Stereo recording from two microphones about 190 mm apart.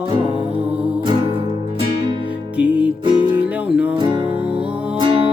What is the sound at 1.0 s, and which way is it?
Music, 25° right (ahead or behind).